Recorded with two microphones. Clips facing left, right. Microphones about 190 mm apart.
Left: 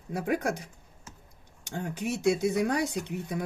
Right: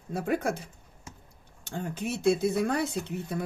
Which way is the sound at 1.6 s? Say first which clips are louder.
Left 1 dB; 15° left (ahead or behind).